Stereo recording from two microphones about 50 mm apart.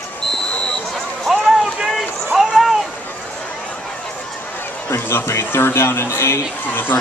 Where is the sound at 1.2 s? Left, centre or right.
Centre.